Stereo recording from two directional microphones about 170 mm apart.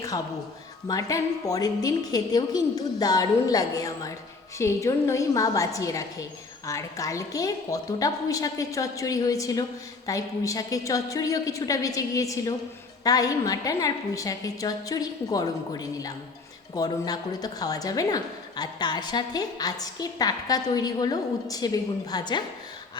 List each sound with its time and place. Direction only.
0.9 s a woman's voice: 20° left (ahead or behind)